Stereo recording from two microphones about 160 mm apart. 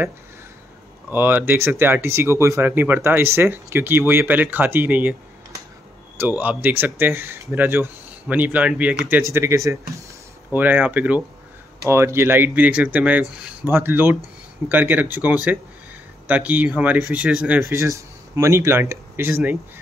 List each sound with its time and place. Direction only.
1.1 s speech: 10° right (ahead or behind)
6.1 s speech: 10° right (ahead or behind)